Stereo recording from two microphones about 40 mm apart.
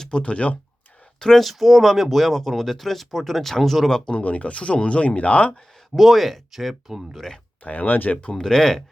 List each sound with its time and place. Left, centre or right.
0.1 s speech: left
1.2 s speech: centre
1.5 s speech: centre
3.8 s speech: centre
4.1 s speech: left
5.9 s speech: centre
7.6 s speech: left
8.4 s speech: centre